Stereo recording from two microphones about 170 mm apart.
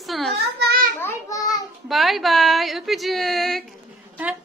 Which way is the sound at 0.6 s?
65° right (ahead or behind).